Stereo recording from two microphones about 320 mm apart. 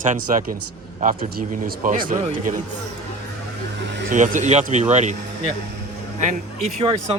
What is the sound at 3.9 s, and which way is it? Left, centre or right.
Speech, right.